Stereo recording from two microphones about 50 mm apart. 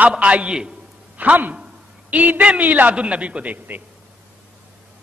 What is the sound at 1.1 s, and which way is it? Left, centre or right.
A man's voice, right.